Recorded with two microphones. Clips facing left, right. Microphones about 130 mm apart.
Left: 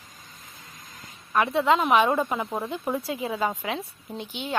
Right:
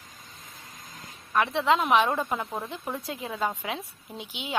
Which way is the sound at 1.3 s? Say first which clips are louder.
Left 2 dB; centre (ahead or behind).